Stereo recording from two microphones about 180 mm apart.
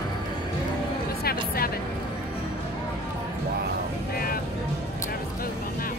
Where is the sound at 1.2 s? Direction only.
55° left (ahead or behind).